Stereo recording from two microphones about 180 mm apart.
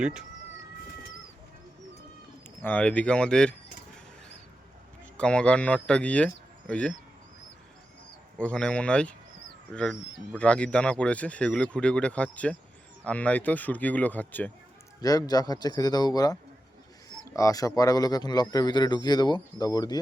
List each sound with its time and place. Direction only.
0.0 s speech: 5° right (ahead or behind)
2.6 s speech: 10° left (ahead or behind)
5.1 s speech: 5° left (ahead or behind)
8.4 s speech: 5° left (ahead or behind)
15.0 s speech: 20° left (ahead or behind)